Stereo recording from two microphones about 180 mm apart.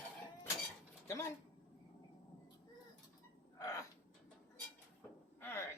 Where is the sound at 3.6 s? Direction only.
20° left (ahead or behind).